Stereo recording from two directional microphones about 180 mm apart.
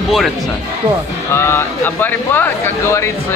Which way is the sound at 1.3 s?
15° left (ahead or behind).